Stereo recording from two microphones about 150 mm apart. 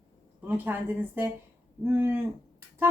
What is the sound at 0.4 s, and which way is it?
Speech, 15° right (ahead or behind).